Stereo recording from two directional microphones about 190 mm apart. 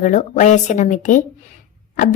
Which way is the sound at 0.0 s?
40° left (ahead or behind).